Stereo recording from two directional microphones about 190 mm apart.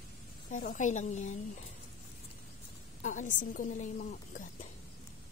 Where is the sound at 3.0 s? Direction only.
40° left (ahead or behind).